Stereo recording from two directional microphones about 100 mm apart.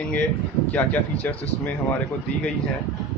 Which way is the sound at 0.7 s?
15° left (ahead or behind).